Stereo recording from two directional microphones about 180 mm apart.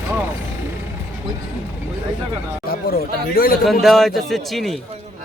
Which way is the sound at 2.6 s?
55° left (ahead or behind).